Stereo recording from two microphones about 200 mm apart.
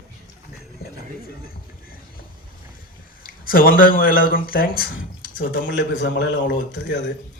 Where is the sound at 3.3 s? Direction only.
45° left (ahead or behind).